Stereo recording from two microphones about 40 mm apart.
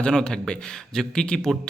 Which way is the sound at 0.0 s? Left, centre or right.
Centre.